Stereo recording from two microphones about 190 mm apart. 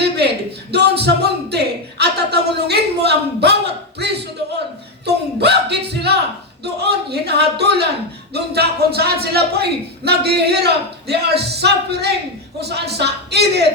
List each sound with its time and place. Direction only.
0.7 s speech: 60° right (ahead or behind)